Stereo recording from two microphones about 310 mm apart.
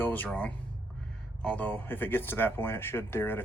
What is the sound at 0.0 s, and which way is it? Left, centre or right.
Speech, centre.